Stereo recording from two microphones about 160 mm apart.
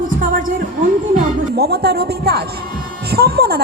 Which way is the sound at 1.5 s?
90° right.